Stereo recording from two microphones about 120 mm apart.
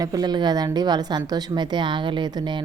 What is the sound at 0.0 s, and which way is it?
A woman's voice, 35° right (ahead or behind).